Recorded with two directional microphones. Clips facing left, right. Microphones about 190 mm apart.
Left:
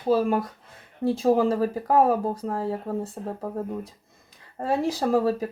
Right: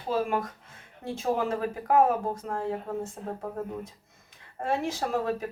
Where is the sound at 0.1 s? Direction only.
35° left (ahead or behind).